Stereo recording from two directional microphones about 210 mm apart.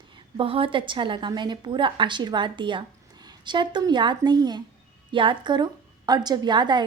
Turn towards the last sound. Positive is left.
turn(degrees=-20)  # may be behind; listen again after turning